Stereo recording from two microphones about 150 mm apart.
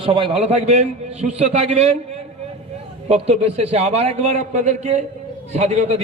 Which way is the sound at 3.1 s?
45° right (ahead or behind).